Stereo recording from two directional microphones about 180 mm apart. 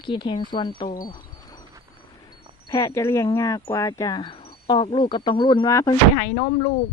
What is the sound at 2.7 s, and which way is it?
Speech, 15° left (ahead or behind).